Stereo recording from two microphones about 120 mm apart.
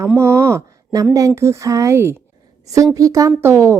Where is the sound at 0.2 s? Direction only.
20° right (ahead or behind).